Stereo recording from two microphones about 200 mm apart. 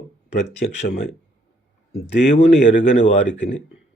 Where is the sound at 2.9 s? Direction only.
35° left (ahead or behind).